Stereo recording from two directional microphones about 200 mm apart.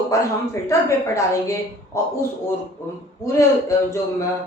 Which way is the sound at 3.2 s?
15° left (ahead or behind).